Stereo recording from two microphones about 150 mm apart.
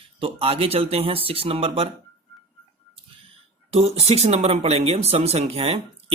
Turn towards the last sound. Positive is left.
turn(degrees=-40)  # may be behind; listen again after turning